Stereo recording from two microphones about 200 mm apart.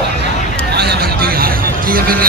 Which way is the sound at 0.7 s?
50° right (ahead or behind).